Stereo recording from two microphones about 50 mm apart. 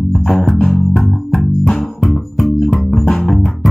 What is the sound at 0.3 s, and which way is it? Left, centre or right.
Music, centre.